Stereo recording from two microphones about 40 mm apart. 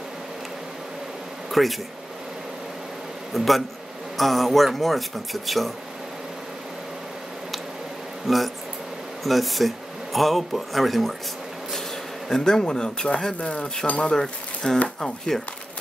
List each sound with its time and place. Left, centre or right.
1.5 s speech: centre
3.3 s speech: centre
8.3 s speech: centre
12.3 s speech: centre; by 14.1 s left
14.1 s speech: centre